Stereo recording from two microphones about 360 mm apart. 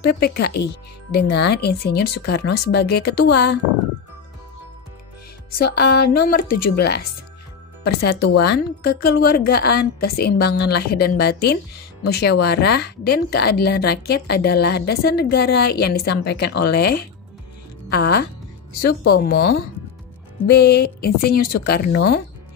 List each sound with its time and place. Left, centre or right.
0.0 s a woman's voice: left
5.6 s a woman's voice: left